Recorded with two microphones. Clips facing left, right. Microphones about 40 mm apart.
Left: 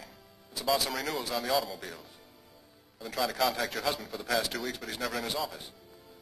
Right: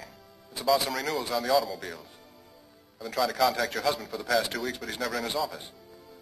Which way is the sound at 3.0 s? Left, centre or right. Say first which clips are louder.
Right 4 dB; centre.